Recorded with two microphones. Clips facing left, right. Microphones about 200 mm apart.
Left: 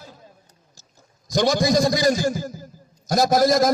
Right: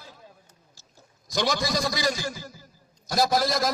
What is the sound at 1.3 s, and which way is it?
A man's voice, 45° left (ahead or behind).